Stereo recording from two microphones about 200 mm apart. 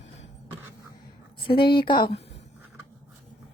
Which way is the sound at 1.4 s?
25° left (ahead or behind).